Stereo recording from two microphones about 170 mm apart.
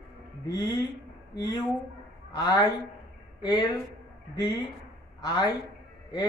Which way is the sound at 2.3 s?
20° left (ahead or behind).